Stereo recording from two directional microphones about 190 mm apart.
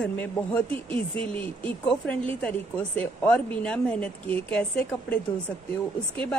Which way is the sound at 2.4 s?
10° left (ahead or behind).